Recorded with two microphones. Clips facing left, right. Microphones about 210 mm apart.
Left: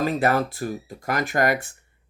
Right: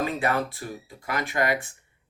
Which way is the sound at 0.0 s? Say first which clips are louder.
Left 4 dB; 40° left (ahead or behind).